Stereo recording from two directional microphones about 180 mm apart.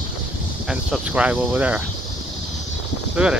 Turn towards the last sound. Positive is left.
turn(degrees=-5)  # may be behind; listen again after turning